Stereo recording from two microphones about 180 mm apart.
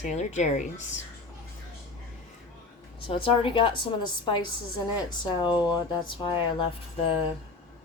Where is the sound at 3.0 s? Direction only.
30° left (ahead or behind).